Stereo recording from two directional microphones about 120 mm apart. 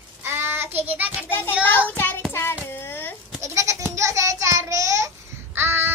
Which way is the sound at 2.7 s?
20° left (ahead or behind).